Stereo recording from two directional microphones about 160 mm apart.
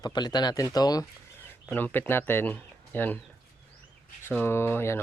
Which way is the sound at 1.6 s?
10° left (ahead or behind).